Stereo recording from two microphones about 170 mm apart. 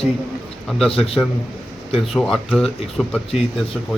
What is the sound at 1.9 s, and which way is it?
Speech, centre (ahead or behind).